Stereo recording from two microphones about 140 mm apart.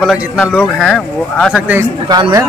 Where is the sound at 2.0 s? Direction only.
30° right (ahead or behind).